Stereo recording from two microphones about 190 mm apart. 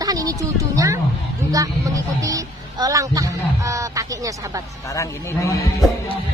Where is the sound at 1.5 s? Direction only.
20° right (ahead or behind).